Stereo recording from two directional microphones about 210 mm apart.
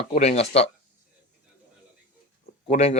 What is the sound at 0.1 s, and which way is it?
Speech, 30° left (ahead or behind).